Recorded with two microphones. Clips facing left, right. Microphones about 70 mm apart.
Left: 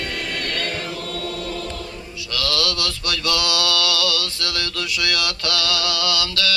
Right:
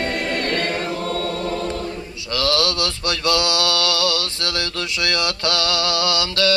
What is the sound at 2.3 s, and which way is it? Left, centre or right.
Mantra, right.